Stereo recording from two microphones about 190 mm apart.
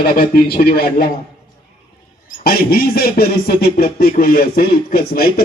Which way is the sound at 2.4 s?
50° left (ahead or behind).